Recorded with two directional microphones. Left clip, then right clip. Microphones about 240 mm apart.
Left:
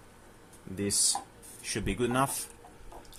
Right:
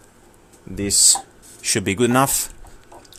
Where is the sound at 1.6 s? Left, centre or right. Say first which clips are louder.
Right 12 dB; right.